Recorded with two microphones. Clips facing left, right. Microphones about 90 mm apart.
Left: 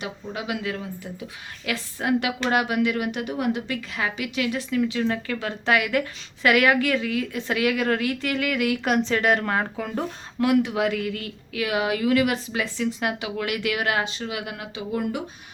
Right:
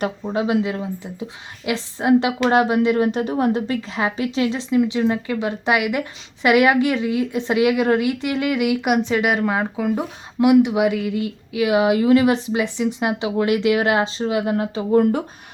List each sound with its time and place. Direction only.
0.3 s a woman's voice: 30° right (ahead or behind)